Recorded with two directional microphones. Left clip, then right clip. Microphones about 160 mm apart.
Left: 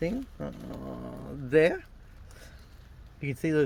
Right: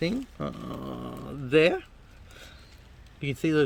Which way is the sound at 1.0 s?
15° right (ahead or behind).